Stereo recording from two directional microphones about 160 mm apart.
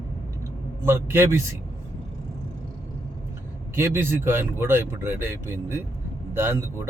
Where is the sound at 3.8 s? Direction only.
15° right (ahead or behind).